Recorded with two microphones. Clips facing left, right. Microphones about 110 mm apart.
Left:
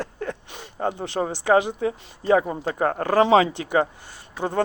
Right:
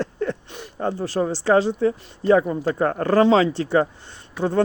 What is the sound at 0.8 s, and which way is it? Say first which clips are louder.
Speech: right 2 dB; 20° left (ahead or behind).